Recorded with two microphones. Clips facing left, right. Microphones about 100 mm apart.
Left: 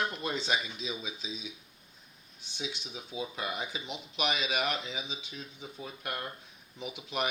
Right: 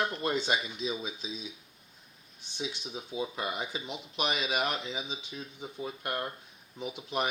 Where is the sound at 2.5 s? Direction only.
35° right (ahead or behind).